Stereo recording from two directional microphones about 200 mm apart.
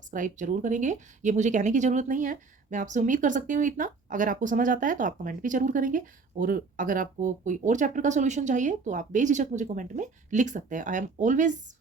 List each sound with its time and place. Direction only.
0.1 s speech: 40° right (ahead or behind)